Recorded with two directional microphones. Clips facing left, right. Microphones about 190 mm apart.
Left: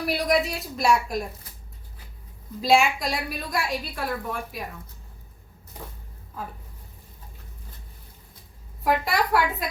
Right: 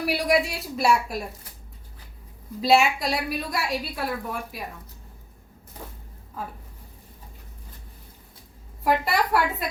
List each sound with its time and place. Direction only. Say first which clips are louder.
0.0 s a woman's voice: right 1 dB; 10° right (ahead or behind)
2.6 s a woman's voice: right 1 dB; 5° right (ahead or behind)
8.8 s a woman's voice: right 1 dB; centre (ahead or behind)